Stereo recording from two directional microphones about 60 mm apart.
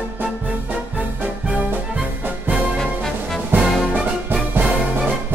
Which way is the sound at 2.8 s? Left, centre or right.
Centre.